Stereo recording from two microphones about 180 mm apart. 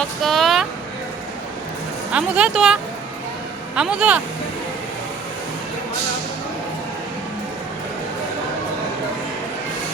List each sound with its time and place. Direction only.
0.0 s speech: centre (ahead or behind)
2.1 s speech: 5° right (ahead or behind)
3.8 s speech: 5° right (ahead or behind)